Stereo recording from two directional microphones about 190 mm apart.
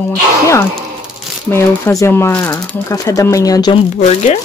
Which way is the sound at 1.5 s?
15° left (ahead or behind).